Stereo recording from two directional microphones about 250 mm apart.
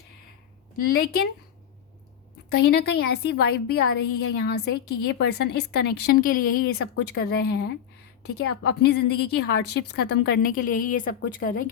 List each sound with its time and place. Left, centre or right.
0.9 s a woman's voice: left
2.5 s a woman's voice: left